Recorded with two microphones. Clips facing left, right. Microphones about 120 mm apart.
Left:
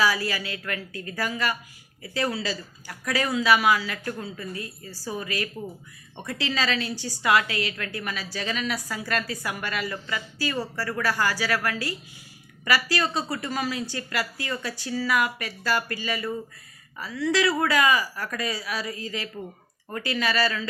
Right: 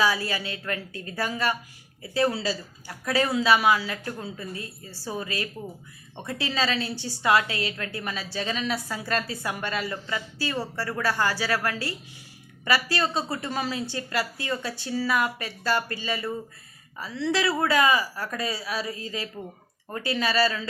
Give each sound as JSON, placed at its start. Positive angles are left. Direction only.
{"t": 0.0, "sound": "a woman's voice", "side_deg": -20}